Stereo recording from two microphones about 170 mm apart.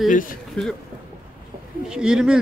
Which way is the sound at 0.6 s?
5° left (ahead or behind).